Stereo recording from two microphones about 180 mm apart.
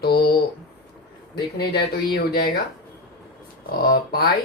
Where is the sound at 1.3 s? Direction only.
60° left (ahead or behind).